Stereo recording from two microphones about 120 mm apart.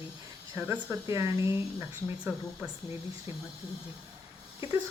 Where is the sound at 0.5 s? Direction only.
20° right (ahead or behind).